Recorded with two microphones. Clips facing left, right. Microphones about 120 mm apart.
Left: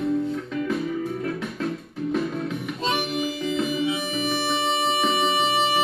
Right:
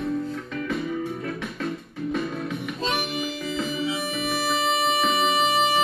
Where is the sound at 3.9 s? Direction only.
25° left (ahead or behind).